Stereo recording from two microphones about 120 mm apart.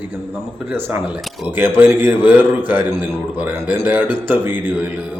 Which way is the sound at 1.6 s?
20° right (ahead or behind).